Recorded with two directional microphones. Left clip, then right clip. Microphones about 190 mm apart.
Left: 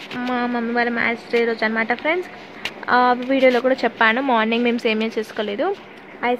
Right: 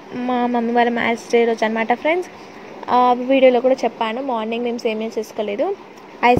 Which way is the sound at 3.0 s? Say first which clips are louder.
Right 4 dB; 30° left (ahead or behind).